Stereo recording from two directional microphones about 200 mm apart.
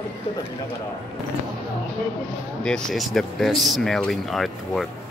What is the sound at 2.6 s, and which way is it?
Speech, 5° left (ahead or behind).